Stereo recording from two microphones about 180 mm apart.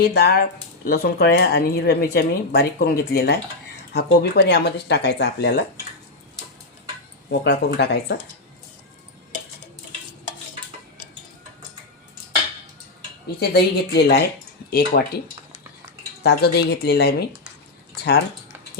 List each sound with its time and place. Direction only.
0.0 s speech: 65° left (ahead or behind)
7.3 s speech: 70° left (ahead or behind)
13.4 s speech: 65° left (ahead or behind)
16.2 s speech: 65° left (ahead or behind)